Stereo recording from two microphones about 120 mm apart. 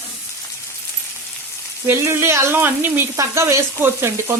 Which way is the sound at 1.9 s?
20° right (ahead or behind).